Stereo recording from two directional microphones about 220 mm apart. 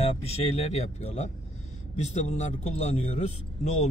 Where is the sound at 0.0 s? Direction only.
30° left (ahead or behind).